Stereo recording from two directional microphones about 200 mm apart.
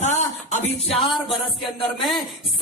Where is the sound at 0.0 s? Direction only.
35° left (ahead or behind).